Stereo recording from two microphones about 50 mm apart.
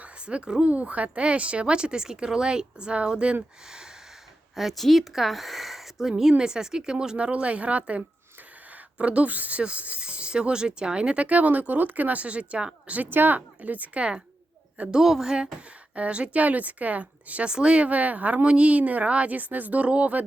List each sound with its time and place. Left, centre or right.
0.0 s speech: right
3.7 s a sound: centre
4.5 s a woman's voice: centre; by 13.0 s right
13.0 s speech: right
14.8 s a woman's voice: centre
16.0 s speech: right